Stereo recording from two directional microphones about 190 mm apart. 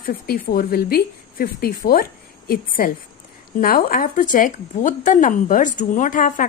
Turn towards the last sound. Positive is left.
turn(degrees=45)  # may be behind; listen again after turning